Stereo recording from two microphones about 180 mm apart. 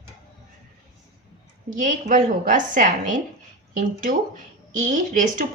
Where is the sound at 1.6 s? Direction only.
45° right (ahead or behind).